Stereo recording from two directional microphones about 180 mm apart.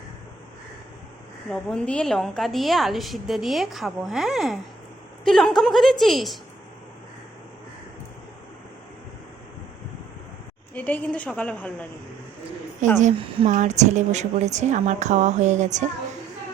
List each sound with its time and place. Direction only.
1.5 s a woman's voice: 5° left (ahead or behind)
10.8 s a woman's voice: 10° left (ahead or behind)
12.8 s a woman's voice: 45° right (ahead or behind)
13.1 s speech: 30° right (ahead or behind)
13.5 s a woman's voice: 40° right (ahead or behind)